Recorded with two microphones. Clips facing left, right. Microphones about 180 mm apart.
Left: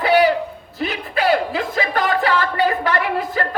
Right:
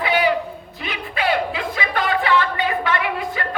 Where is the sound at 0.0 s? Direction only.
40° left (ahead or behind).